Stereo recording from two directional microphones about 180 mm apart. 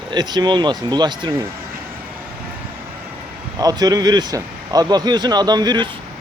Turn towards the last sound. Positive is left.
turn(degrees=-25)  # may be behind; listen again after turning